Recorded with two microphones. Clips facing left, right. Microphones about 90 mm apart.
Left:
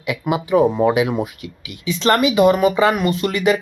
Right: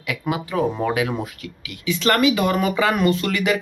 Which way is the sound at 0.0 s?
25° left (ahead or behind).